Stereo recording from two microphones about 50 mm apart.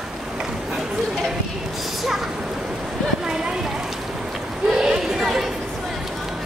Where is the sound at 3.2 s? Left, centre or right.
Centre.